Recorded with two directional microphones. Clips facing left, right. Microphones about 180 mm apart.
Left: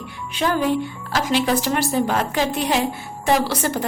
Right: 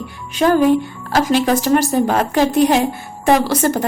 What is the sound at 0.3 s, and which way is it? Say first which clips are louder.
A woman's voice: right 7 dB; 45° right (ahead or behind).